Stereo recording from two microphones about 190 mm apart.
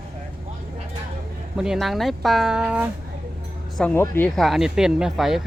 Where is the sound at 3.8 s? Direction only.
10° left (ahead or behind).